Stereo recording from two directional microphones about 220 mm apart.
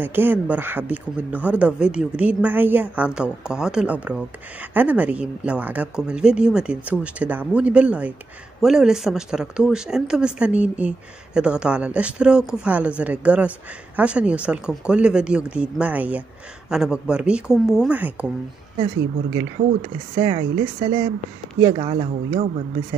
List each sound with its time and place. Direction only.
0.0 s speech: 10° right (ahead or behind)
20.2 s speech: 25° right (ahead or behind)